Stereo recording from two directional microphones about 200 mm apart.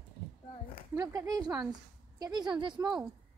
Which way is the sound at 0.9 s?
20° right (ahead or behind).